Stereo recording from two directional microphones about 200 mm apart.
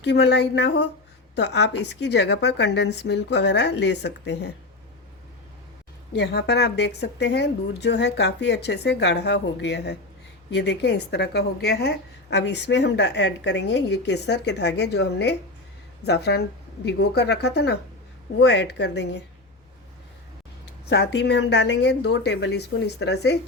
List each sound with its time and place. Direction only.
0.0 s a woman's voice: 60° left (ahead or behind)
6.1 s a woman's voice: 55° left (ahead or behind)
20.9 s a woman's voice: 60° left (ahead or behind)